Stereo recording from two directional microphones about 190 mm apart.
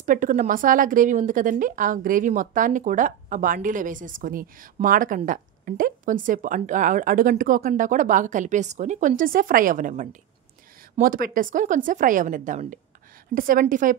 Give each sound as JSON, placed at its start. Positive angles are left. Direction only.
{"t": 0.0, "sound": "a woman's voice", "side_deg": -45}